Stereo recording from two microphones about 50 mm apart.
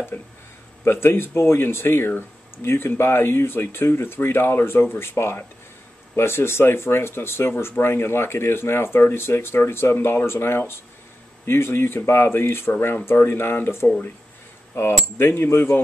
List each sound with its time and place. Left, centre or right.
0.1 s speech: left
9.9 s speech: left
10.2 s speech: left
12.7 s speech: left